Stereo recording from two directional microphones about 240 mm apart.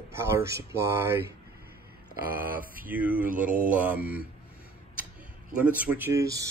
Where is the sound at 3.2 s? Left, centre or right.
Right.